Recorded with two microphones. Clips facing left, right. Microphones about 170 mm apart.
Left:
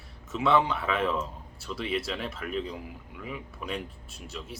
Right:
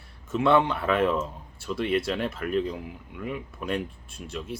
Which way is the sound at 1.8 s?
50° right (ahead or behind).